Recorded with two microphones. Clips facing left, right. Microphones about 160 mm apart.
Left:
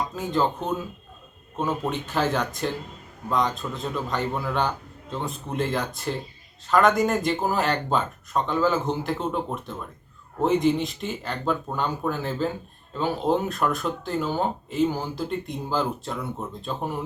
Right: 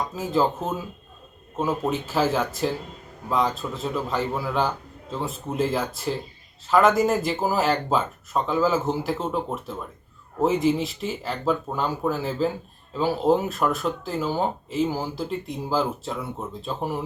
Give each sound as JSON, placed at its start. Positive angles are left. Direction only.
{"t": 0.2, "sound": "speech", "side_deg": -5}